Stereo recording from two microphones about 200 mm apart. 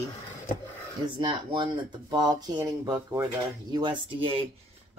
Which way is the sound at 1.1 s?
25° right (ahead or behind).